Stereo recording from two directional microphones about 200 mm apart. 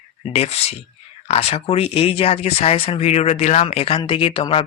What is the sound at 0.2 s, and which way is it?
Speech, 30° left (ahead or behind).